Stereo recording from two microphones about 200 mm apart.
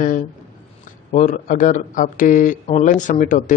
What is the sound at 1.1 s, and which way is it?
Speech, 40° left (ahead or behind).